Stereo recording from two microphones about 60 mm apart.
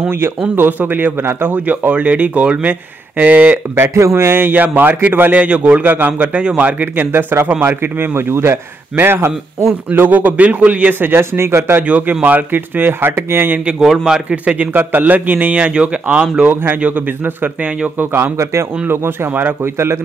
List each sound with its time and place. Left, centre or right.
0.0 s speech: right
1.9 s a man's voice: right
3.7 s speech: right
5.4 s a man's voice: right
11.1 s speech: right
11.8 s speech: right
14.3 s a man's voice: right
16.4 s a man's voice: right
18.4 s speech: right
18.9 s speech: right